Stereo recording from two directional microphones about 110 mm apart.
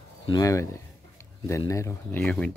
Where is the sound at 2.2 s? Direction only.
10° left (ahead or behind).